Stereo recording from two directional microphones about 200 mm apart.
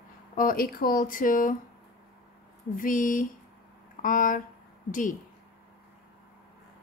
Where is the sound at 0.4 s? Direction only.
45° left (ahead or behind).